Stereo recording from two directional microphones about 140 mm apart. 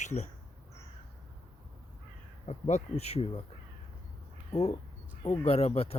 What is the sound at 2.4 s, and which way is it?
Speech, 50° left (ahead or behind).